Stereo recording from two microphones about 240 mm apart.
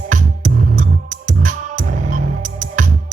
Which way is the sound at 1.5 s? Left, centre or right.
Right.